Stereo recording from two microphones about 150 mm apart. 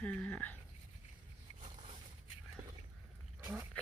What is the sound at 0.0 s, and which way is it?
Speech, 10° left (ahead or behind).